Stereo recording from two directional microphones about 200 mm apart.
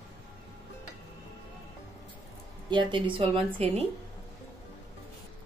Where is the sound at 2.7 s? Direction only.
25° right (ahead or behind).